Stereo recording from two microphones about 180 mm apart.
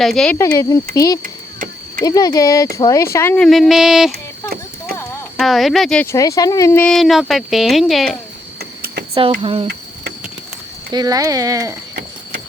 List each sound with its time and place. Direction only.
0.0 s speech: centre (ahead or behind)
0.3 s speech: 20° left (ahead or behind)
1.2 s a sound: 50° right (ahead or behind)
2.0 s speech: 20° left (ahead or behind); by 4.1 s centre (ahead or behind)
5.4 s speech: centre (ahead or behind)
9.4 s speech: 35° right (ahead or behind)
10.9 s speech: 20° right (ahead or behind)